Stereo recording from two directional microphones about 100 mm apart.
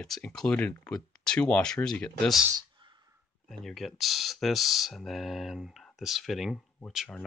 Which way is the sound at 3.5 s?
Centre (ahead or behind).